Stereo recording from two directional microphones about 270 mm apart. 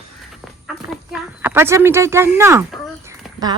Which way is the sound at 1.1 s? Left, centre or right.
Centre.